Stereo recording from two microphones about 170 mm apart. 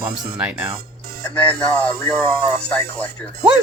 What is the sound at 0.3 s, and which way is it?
Speech, 10° right (ahead or behind).